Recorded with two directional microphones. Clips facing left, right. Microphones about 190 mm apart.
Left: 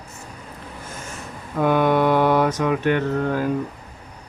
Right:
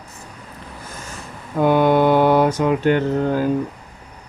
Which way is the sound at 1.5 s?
30° right (ahead or behind).